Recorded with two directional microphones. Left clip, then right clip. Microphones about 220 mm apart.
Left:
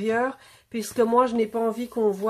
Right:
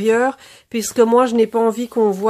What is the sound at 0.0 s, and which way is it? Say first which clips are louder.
Speech: right 9 dB; 45° right (ahead or behind).